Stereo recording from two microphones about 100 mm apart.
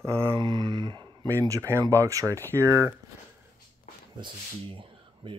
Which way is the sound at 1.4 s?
30° right (ahead or behind).